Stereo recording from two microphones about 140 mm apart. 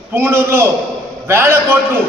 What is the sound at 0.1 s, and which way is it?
A man's voice, 15° right (ahead or behind).